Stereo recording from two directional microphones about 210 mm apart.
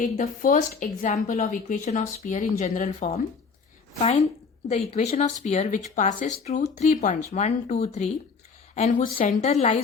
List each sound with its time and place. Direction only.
0.0 s a woman's voice: 40° left (ahead or behind)
4.7 s a woman's voice: 35° left (ahead or behind)